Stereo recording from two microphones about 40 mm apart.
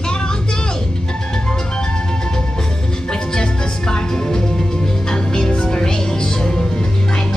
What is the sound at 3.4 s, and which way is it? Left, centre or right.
Music, centre.